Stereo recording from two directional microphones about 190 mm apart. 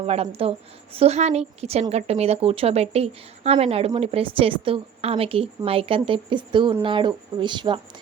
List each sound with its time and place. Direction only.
0.0 s speech: 30° right (ahead or behind)